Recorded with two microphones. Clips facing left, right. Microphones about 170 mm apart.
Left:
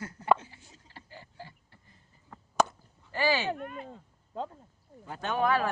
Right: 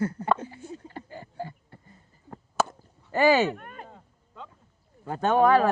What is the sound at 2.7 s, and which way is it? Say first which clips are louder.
Chop: right 9 dB; 45° right (ahead or behind).